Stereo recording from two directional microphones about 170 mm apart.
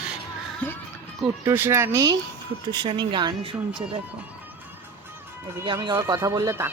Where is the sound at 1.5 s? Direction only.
15° right (ahead or behind).